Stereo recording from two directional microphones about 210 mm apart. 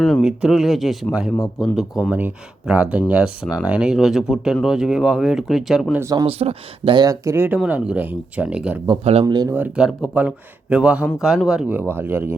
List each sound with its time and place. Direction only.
0.0 s speech: centre (ahead or behind)
6.0 s speech: 15° right (ahead or behind)
6.2 s speech: 25° right (ahead or behind); by 8.8 s 5° right (ahead or behind)
8.9 s speech: 30° right (ahead or behind)
9.2 s speech: 15° right (ahead or behind)